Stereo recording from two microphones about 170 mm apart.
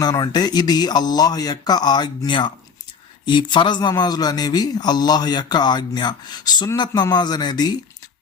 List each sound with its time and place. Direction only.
0.0 s speech: 25° left (ahead or behind)